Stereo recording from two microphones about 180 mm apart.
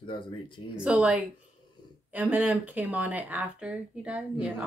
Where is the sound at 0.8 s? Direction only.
5° right (ahead or behind).